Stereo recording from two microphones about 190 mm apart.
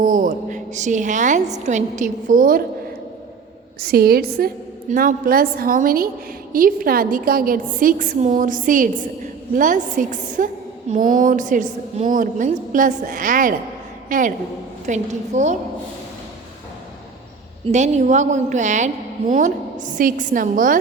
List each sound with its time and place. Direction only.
0.0 s a woman's voice: 45° right (ahead or behind)
3.8 s a woman's voice: 55° right (ahead or behind)
17.7 s a woman's voice: 35° right (ahead or behind)